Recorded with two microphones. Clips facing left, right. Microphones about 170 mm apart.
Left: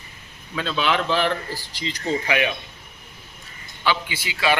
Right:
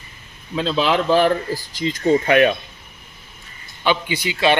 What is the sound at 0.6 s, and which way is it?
Speech, 30° right (ahead or behind).